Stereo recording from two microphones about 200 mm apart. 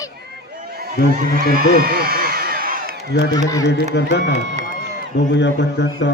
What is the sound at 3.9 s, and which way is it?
Mantra, 60° left (ahead or behind).